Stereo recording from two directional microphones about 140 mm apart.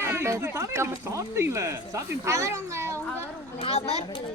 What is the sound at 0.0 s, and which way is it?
Speech, 15° right (ahead or behind).